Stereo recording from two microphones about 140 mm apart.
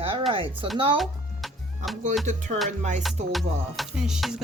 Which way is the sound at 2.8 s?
55° right (ahead or behind).